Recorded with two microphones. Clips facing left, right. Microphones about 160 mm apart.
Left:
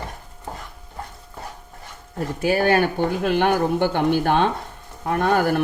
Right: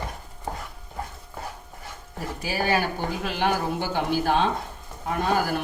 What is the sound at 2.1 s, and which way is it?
Speech, 55° left (ahead or behind).